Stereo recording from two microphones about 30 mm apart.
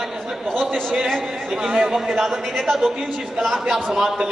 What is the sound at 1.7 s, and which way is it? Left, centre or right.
Chant, right.